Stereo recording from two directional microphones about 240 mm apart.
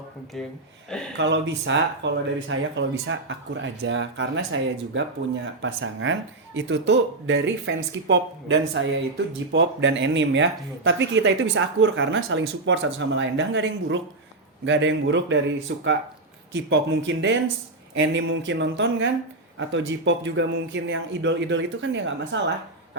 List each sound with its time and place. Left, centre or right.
1.1 s speech: right